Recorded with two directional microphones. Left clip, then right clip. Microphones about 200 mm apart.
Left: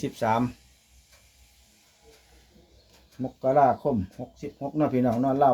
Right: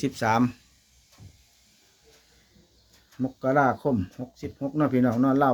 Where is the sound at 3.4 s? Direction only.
25° right (ahead or behind).